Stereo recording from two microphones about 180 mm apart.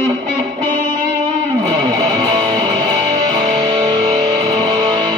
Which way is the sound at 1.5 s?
20° right (ahead or behind).